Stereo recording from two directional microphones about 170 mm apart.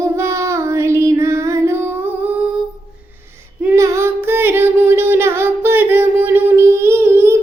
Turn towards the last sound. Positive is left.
turn(degrees=-15)  # may be behind; listen again after turning